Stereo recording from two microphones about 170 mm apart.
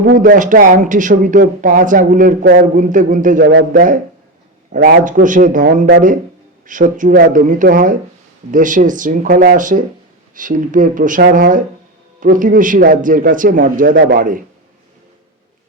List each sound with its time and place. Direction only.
0.2 s speech: 50° right (ahead or behind)
2.7 s speech: 50° right (ahead or behind)
13.9 s a man's voice: 65° right (ahead or behind)